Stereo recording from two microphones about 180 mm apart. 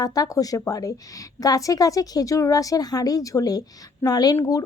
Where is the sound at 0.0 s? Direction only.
20° left (ahead or behind).